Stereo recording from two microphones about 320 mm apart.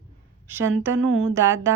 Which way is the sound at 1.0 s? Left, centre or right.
Right.